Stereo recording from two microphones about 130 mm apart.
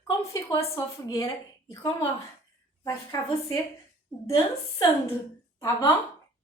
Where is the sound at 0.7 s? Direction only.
25° left (ahead or behind).